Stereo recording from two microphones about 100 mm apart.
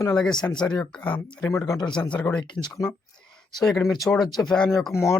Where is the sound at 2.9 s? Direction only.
5° left (ahead or behind).